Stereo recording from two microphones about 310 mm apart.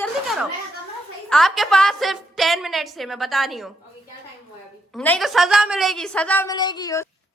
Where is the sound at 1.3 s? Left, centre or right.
Centre.